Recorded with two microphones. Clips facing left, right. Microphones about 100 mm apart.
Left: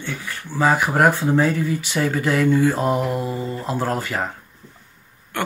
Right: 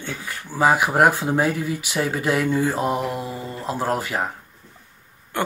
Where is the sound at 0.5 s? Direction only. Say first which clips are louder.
Right 1 dB; 10° right (ahead or behind).